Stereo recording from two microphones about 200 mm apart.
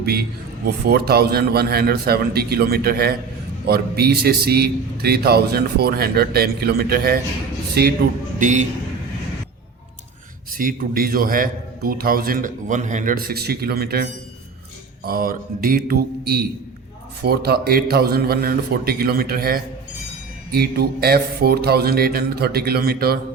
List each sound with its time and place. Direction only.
0.0 s a man's voice: 50° right (ahead or behind)
8.4 s a man's voice: 40° right (ahead or behind)
10.5 s a man's voice: 45° right (ahead or behind)